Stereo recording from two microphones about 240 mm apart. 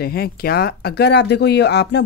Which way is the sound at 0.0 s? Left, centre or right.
Left.